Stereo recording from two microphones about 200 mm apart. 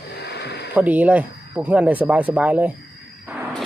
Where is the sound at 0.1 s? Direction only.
55° left (ahead or behind).